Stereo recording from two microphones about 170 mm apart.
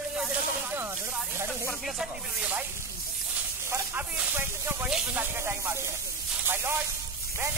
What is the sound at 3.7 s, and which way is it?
Speech, 15° right (ahead or behind).